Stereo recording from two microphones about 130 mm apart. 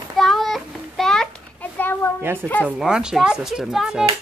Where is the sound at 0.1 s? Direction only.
Centre (ahead or behind).